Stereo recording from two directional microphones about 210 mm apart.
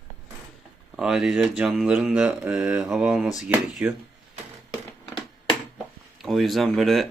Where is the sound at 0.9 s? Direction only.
Centre (ahead or behind).